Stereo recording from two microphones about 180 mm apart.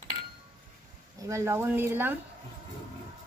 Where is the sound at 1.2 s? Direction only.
15° right (ahead or behind).